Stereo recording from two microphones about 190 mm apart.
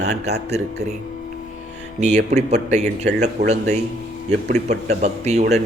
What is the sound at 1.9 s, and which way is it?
A man's voice, 35° right (ahead or behind).